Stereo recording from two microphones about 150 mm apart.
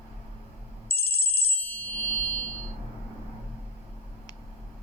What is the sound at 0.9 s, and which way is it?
Ringtone, 15° left (ahead or behind).